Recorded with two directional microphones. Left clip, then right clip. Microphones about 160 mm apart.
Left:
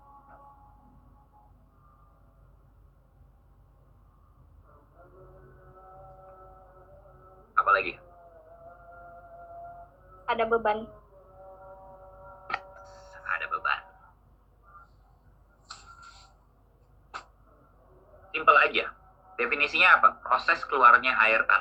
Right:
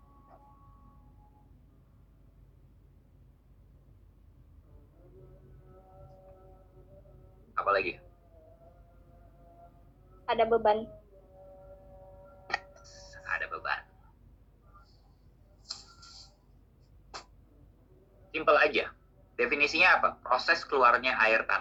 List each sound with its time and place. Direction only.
7.5 s music: 30° right (ahead or behind)
10.2 s a woman's voice: 30° right (ahead or behind)
12.7 s music: 25° right (ahead or behind)
18.3 s a sound: 30° right (ahead or behind)
19.4 s speech: 30° right (ahead or behind)